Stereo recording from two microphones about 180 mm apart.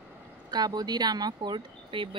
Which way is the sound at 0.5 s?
20° right (ahead or behind).